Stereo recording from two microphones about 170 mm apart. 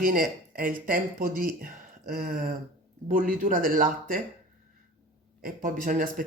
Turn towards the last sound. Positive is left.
turn(degrees=-55)  # may be behind; listen again after turning